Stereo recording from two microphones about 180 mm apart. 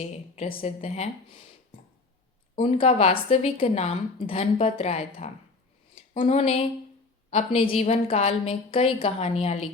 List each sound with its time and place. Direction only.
0.6 s a woman's voice: 35° left (ahead or behind)
2.6 s a woman's voice: 35° left (ahead or behind)
5.9 s a sound: 35° left (ahead or behind)
7.3 s a woman's voice: 35° left (ahead or behind)